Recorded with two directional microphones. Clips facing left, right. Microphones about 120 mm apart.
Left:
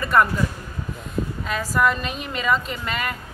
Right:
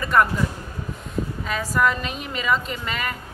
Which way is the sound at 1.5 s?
5° left (ahead or behind).